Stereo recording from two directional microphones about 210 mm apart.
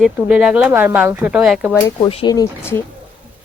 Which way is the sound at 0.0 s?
5° right (ahead or behind).